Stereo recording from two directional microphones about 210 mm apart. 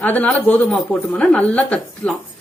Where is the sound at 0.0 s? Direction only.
10° left (ahead or behind).